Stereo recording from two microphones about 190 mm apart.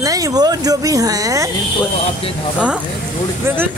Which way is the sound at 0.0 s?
20° right (ahead or behind).